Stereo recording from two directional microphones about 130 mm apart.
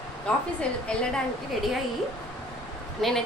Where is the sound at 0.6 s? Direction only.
10° left (ahead or behind).